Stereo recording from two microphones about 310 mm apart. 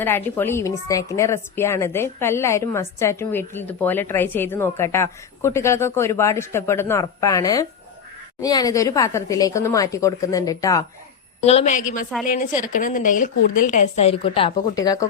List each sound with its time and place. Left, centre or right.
0.0 s a woman's voice: centre
11.4 s speech: left